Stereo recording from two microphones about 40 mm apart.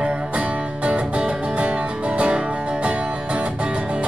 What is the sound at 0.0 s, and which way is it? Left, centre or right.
Music, right.